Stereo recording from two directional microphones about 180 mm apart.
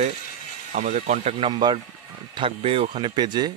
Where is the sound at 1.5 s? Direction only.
25° right (ahead or behind).